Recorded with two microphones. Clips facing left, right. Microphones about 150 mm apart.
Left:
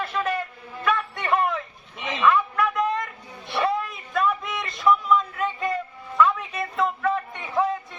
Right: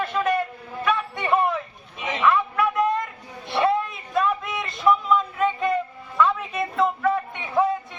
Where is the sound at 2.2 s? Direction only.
5° right (ahead or behind).